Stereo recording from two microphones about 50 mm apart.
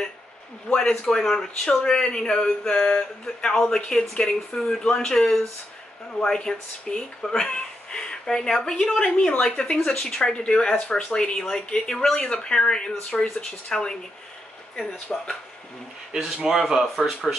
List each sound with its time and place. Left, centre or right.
0.7 s speech: centre
15.1 s speech: centre
16.1 s speech: centre